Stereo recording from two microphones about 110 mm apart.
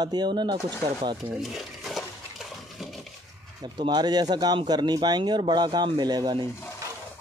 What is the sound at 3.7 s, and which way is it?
Speech, 45° right (ahead or behind).